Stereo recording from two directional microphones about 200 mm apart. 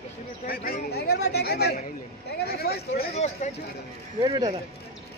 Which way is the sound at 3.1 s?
35° left (ahead or behind).